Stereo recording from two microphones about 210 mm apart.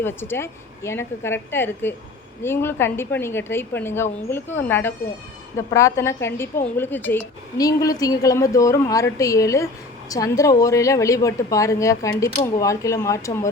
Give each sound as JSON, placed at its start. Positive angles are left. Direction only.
{"t": 0.0, "sound": "a woman's voice", "side_deg": 10}